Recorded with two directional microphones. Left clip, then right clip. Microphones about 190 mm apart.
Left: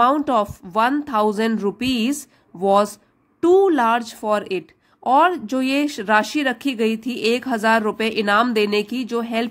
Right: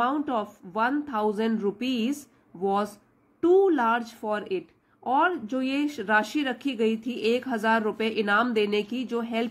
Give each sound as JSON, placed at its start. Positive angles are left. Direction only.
{"t": 0.0, "sound": "speech", "side_deg": 35}